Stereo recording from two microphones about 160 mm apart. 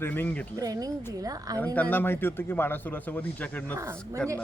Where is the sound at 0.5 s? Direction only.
20° right (ahead or behind).